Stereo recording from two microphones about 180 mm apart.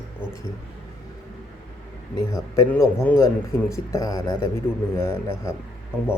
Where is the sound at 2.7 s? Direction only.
10° left (ahead or behind).